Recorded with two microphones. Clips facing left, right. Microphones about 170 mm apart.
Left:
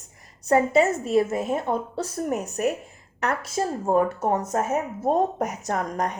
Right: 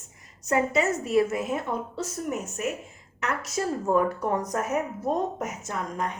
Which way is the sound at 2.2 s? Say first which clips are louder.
Left 6 dB; 40° left (ahead or behind).